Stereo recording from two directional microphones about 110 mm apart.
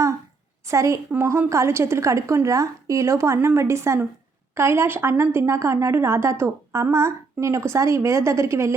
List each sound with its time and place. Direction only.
0.7 s a woman's voice: 30° right (ahead or behind)